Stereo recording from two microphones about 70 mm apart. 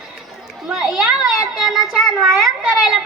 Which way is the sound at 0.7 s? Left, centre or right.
Centre.